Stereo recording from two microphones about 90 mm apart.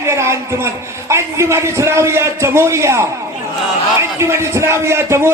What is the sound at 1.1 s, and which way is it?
A man's voice, 30° right (ahead or behind).